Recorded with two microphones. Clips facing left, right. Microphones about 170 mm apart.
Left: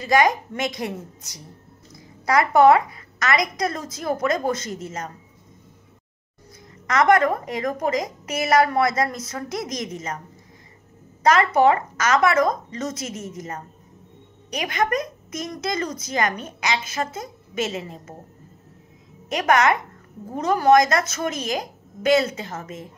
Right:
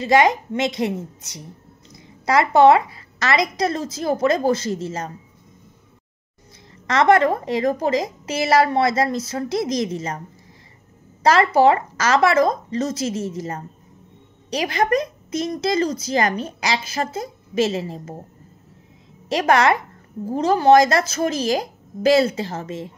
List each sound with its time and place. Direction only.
0.0 s a woman's voice: 25° right (ahead or behind)
6.9 s a woman's voice: 30° right (ahead or behind)
11.2 s speech: 30° right (ahead or behind)
19.2 s speech: 30° right (ahead or behind)